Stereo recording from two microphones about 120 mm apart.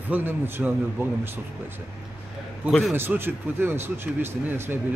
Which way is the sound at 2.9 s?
20° right (ahead or behind).